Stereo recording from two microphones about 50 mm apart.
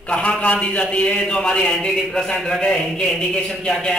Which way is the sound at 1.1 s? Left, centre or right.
Centre.